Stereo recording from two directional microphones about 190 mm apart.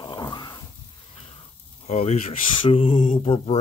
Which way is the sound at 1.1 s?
30° left (ahead or behind).